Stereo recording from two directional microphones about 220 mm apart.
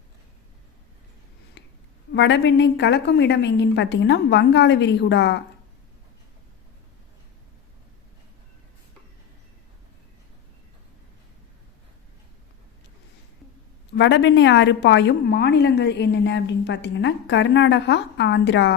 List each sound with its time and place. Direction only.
1.6 s a sound: 55° left (ahead or behind)
2.1 s a woman's voice: 55° left (ahead or behind)
13.9 s a woman's voice: 55° left (ahead or behind)